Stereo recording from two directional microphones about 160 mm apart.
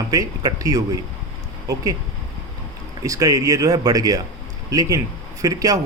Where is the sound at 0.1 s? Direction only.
20° right (ahead or behind).